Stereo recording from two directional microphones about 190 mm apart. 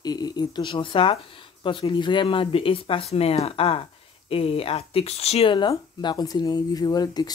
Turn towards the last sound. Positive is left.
turn(degrees=20)  # may be behind; listen again after turning